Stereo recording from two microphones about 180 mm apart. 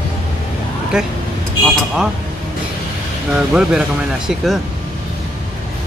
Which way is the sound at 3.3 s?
5° right (ahead or behind).